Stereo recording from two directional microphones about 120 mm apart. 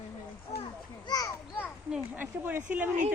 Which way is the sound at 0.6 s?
35° left (ahead or behind).